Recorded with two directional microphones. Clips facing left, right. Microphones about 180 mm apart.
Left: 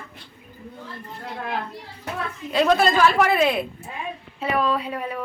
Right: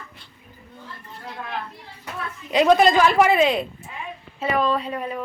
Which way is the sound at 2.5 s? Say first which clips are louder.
Right 3 dB; 15° right (ahead or behind).